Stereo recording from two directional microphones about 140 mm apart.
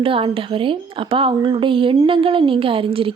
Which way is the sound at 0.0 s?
40° right (ahead or behind).